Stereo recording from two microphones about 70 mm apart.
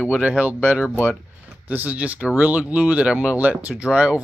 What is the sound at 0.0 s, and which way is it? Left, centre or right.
Speech, centre.